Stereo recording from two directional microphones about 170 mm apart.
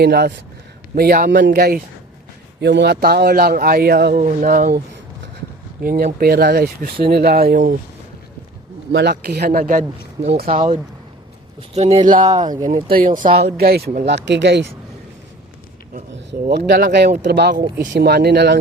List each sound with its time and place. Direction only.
0.0 s speech: 75° right (ahead or behind)
0.9 s speech: 60° right (ahead or behind)
2.6 s speech: 85° right; by 4.2 s 70° right (ahead or behind)
4.2 s speech: 50° right (ahead or behind)
5.8 s speech: 55° right (ahead or behind)
8.9 s speech: 75° right (ahead or behind)
9.5 s speech: 50° right (ahead or behind)
10.2 s speech: 65° right (ahead or behind)
11.7 s speech: 35° right (ahead or behind)
12.2 s speech: 25° right (ahead or behind)
12.6 s speech: 50° right (ahead or behind)
13.4 s speech: 70° right (ahead or behind); by 14.6 s 90° right
16.5 s speech: 80° right